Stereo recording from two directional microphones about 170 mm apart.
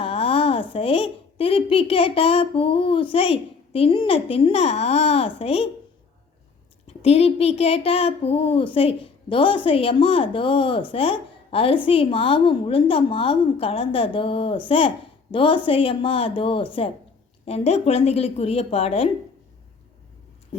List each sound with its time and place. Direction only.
0.0 s a woman's voice: 35° left (ahead or behind)
6.8 s a woman's voice: 35° left (ahead or behind)